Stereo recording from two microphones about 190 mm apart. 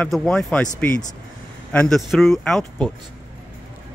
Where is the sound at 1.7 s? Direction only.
Centre (ahead or behind).